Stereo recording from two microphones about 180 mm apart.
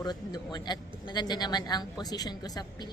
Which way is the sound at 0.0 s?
20° left (ahead or behind).